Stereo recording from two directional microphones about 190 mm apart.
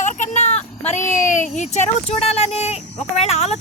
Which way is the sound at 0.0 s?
40° left (ahead or behind).